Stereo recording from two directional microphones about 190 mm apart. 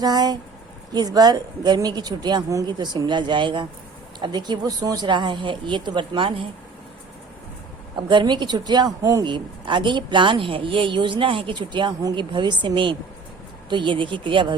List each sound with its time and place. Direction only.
0.0 s a woman's voice: 20° right (ahead or behind)
7.9 s a woman's voice: 25° right (ahead or behind)